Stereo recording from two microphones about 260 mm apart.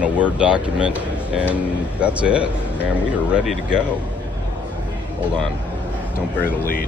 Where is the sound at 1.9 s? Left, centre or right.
Centre.